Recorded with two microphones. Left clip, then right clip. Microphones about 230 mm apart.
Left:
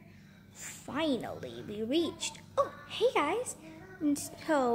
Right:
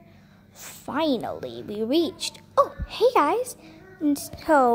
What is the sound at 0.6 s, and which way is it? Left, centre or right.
A woman's voice, centre.